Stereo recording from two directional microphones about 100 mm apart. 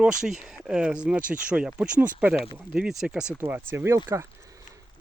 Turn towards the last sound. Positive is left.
turn(degrees=-25)  # may be behind; listen again after turning